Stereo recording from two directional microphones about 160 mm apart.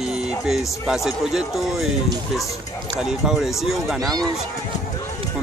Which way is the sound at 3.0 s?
Centre (ahead or behind).